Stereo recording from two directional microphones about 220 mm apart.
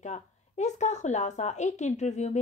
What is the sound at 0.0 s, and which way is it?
Speech, 30° left (ahead or behind).